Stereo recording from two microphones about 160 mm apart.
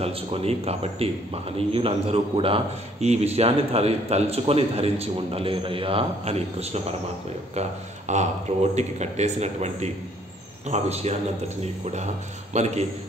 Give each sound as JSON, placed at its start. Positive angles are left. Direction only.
{"t": 0.0, "sound": "a man's voice", "side_deg": -35}
{"t": 8.1, "sound": "a man's voice", "side_deg": -45}